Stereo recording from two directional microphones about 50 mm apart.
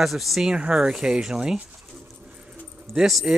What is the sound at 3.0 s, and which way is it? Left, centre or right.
Speech, centre.